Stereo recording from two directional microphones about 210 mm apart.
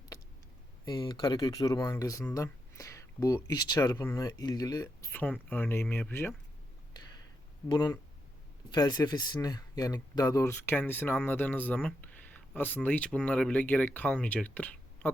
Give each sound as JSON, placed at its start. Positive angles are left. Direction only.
{"t": 0.9, "sound": "speech", "side_deg": 20}
{"t": 7.7, "sound": "speech", "side_deg": 20}